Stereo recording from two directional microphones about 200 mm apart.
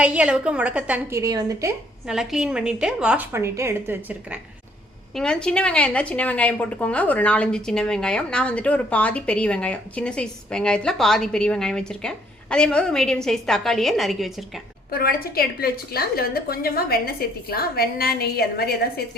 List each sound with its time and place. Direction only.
0.0 s a woman's voice: 5° right (ahead or behind)
2.0 s a woman's voice: 5° right (ahead or behind)
5.1 s a woman's voice: 5° left (ahead or behind)
14.8 s a woman's voice: 50° left (ahead or behind)